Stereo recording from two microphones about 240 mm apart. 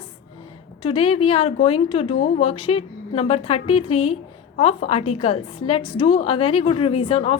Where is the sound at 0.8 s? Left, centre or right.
Left.